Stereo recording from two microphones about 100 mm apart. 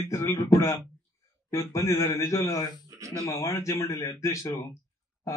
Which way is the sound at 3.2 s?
30° left (ahead or behind).